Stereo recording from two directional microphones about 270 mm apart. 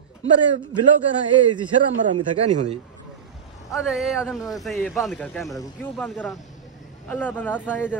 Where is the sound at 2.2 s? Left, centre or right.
Right.